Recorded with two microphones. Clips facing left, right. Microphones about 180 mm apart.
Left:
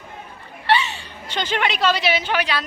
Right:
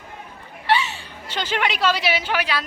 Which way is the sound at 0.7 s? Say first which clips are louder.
Left 1 dB; 5° right (ahead or behind).